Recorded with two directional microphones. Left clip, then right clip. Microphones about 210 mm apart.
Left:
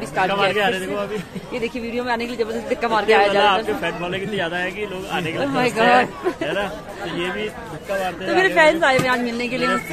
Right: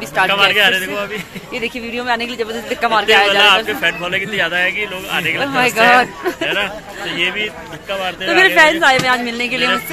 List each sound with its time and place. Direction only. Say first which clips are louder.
0.3 s a man's voice: right 8 dB; 20° left (ahead or behind)
1.5 s speech: right 3 dB; 5° right (ahead or behind)
3.6 s speech: right 6 dB; 15° left (ahead or behind)
5.4 s speech: right 4 dB; 5° right (ahead or behind)
6.4 s a man's voice: right 5 dB; 20° left (ahead or behind)
8.3 s speech: right 5 dB; 10° right (ahead or behind)